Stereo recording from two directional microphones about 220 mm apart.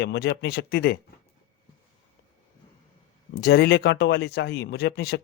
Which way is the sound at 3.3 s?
45° left (ahead or behind).